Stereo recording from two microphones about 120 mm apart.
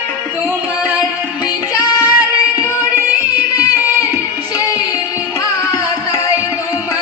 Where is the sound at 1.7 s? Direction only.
30° left (ahead or behind).